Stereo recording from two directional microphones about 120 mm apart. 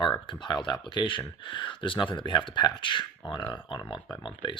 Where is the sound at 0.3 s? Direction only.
40° left (ahead or behind).